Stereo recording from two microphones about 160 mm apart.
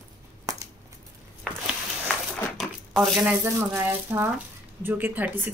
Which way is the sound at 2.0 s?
Centre (ahead or behind).